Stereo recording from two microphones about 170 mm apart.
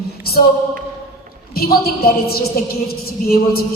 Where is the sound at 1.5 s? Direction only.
65° left (ahead or behind).